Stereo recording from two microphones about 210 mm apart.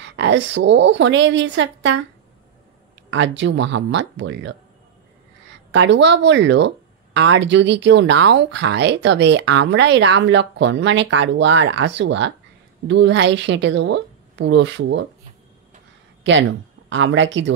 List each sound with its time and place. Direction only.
0.0 s speech: 60° right (ahead or behind)
3.1 s speech: 60° right (ahead or behind)
5.7 s speech: 60° right (ahead or behind)
16.3 s speech: 60° right (ahead or behind)